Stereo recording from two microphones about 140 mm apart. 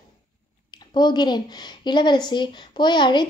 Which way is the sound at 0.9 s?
30° left (ahead or behind).